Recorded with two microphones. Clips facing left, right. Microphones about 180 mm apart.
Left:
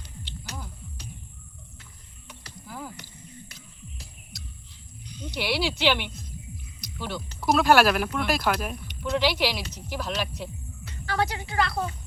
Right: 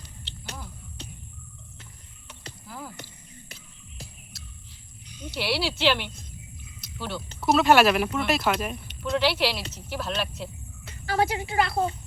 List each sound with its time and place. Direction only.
2.6 s horse: centre (ahead or behind)
5.1 s speech: 5° right (ahead or behind)
7.4 s speech: 5° right (ahead or behind)
10.8 s speech: 25° right (ahead or behind)